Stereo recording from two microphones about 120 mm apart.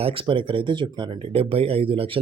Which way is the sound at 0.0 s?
45° right (ahead or behind).